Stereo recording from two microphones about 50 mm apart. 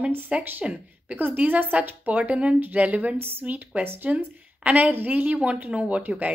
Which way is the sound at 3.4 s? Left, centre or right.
Right.